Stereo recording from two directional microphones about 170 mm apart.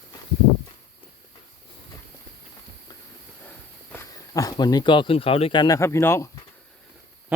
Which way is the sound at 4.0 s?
20° left (ahead or behind).